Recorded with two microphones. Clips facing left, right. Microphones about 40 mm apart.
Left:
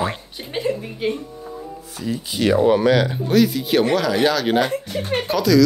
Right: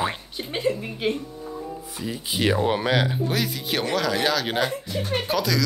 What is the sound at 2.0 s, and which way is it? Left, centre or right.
Speech, centre.